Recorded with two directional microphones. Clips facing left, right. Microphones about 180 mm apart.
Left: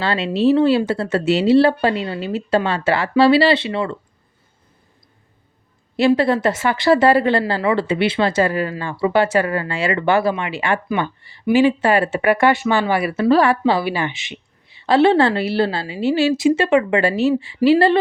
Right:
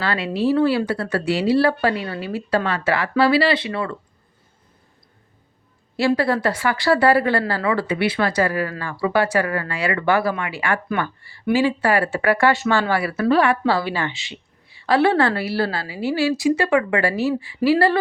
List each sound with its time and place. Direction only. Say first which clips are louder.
0.0 s speech: left 4 dB; 25° left (ahead or behind)
6.0 s speech: left 4 dB; 20° left (ahead or behind)
13.2 s speech: left 3 dB; 35° left (ahead or behind)
13.7 s speech: left 3 dB; 15° left (ahead or behind)